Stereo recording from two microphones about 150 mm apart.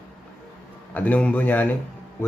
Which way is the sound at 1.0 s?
10° left (ahead or behind).